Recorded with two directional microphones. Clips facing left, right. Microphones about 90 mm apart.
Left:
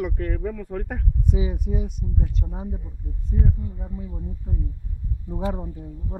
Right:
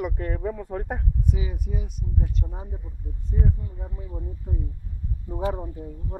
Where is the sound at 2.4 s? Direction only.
Centre (ahead or behind).